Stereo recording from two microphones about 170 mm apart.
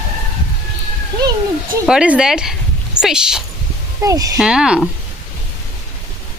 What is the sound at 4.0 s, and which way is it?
Speech, 20° right (ahead or behind).